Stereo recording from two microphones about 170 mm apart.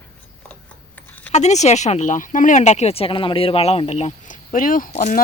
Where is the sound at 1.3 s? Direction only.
40° left (ahead or behind).